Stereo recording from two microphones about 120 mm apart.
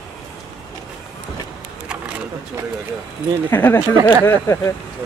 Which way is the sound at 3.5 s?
20° left (ahead or behind).